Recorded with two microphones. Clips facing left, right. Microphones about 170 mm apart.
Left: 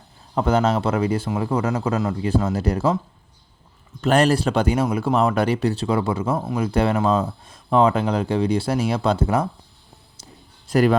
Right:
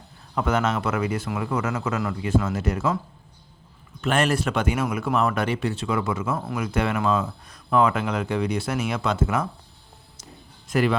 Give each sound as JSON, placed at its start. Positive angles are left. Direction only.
{"t": 0.3, "sound": "speech", "side_deg": 30}
{"t": 4.0, "sound": "speech", "side_deg": 35}
{"t": 10.7, "sound": "speech", "side_deg": 40}